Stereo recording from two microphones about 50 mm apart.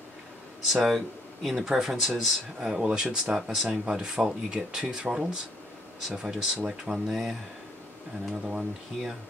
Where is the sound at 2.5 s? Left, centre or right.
Centre.